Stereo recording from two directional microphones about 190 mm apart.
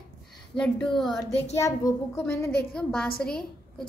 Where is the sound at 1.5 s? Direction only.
15° left (ahead or behind).